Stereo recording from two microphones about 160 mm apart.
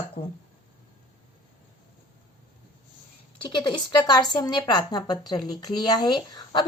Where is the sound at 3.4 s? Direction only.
30° left (ahead or behind).